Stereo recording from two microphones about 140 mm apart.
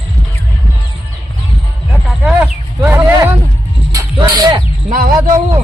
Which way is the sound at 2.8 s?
20° right (ahead or behind).